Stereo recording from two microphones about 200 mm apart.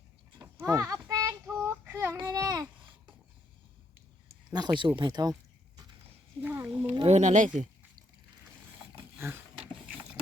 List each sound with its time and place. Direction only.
0.3 s clip-clop: 15° right (ahead or behind)
0.9 s child singing: 10° right (ahead or behind)
2.1 s babbling: 15° right (ahead or behind)
4.5 s speech: 20° right (ahead or behind)
6.4 s a sound: 10° right (ahead or behind)
6.9 s speech: 30° right (ahead or behind)
9.1 s a sound: 10° right (ahead or behind)